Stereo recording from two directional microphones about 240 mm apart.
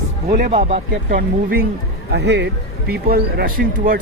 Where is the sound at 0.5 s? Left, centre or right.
Right.